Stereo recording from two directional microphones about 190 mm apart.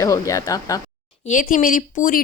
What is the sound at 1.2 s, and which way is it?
Speech, 45° left (ahead or behind).